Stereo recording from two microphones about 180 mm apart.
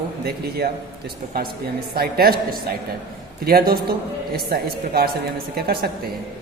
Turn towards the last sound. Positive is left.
turn(degrees=-60)  # may be behind; listen again after turning